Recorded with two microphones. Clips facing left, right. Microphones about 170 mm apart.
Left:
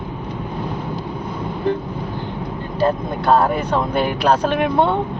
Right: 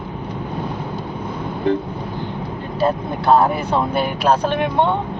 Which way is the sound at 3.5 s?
5° right (ahead or behind).